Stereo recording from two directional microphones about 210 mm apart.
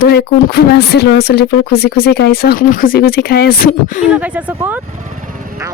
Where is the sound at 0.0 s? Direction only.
50° left (ahead or behind).